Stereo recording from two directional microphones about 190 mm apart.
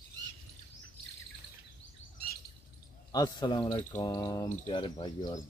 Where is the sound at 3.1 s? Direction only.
20° left (ahead or behind).